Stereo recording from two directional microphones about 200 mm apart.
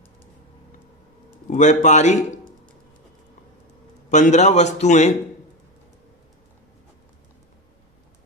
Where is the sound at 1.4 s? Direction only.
40° left (ahead or behind).